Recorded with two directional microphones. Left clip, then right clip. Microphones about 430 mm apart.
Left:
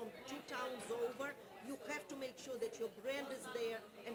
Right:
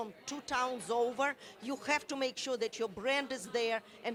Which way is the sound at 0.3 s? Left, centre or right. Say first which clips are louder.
Right 11 dB; right.